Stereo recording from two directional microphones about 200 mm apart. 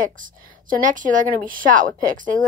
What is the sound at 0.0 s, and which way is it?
A woman's voice, 40° right (ahead or behind).